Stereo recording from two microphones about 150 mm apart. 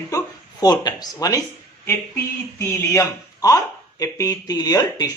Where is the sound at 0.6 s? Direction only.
25° left (ahead or behind).